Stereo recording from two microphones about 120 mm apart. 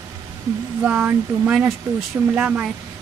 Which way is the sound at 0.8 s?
10° right (ahead or behind).